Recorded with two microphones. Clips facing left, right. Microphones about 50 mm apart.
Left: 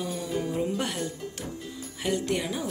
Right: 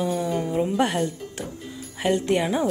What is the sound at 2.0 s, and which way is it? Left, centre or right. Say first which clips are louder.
Speech: right 6 dB; right.